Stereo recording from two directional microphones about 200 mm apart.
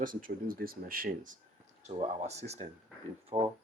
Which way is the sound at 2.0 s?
30° right (ahead or behind).